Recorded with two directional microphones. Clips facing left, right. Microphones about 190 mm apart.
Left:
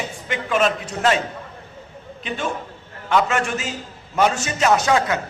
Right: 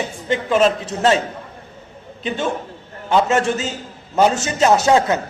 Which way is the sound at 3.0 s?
30° right (ahead or behind).